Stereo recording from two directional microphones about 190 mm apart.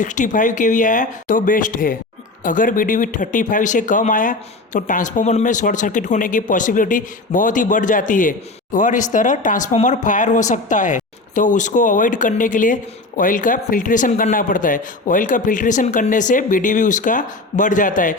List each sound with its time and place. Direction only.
0.0 s speech: 40° left (ahead or behind)